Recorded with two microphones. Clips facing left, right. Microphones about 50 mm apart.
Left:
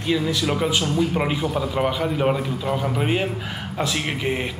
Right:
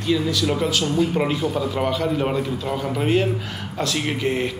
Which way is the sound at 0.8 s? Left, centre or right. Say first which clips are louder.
Right 1 dB; centre.